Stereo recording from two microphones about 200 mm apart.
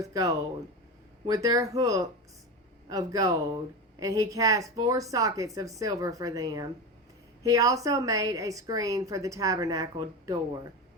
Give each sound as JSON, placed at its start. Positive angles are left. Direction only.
{"t": 0.0, "sound": "a woman's voice", "side_deg": -15}